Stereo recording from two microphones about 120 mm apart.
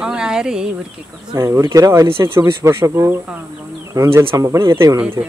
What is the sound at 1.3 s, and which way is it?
Speech, 25° right (ahead or behind).